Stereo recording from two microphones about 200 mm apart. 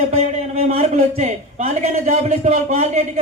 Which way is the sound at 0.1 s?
30° right (ahead or behind).